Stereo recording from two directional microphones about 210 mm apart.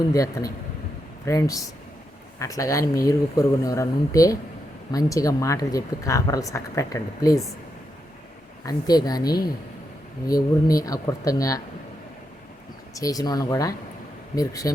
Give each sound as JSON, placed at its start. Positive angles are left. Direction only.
{"t": 0.1, "sound": "speech", "side_deg": 15}
{"t": 8.6, "sound": "a woman's voice", "side_deg": 20}
{"t": 12.9, "sound": "speech", "side_deg": 15}